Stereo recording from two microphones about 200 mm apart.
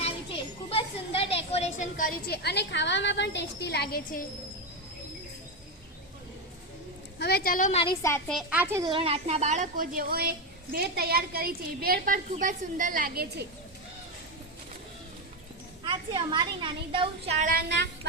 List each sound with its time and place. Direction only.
0.0 s children playing: 25° left (ahead or behind); by 4.2 s 50° left (ahead or behind)
7.2 s a woman's voice: 55° left (ahead or behind)
7.7 s a woman's voice: 30° left (ahead or behind)
8.3 s a child's voice: 5° right (ahead or behind)
8.9 s a child's voice: 25° right (ahead or behind); by 13.4 s 50° right (ahead or behind)
15.8 s speech: 25° right (ahead or behind)
17.4 s a child's voice: 50° right (ahead or behind)